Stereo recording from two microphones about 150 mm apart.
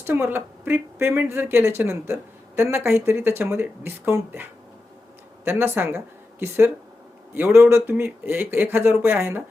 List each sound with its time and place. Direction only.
0.0 s speech: 15° right (ahead or behind)
5.5 s speech: 15° right (ahead or behind)
7.3 s speech: 15° right (ahead or behind)